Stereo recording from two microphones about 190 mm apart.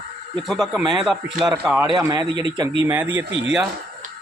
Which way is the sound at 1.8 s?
20° right (ahead or behind).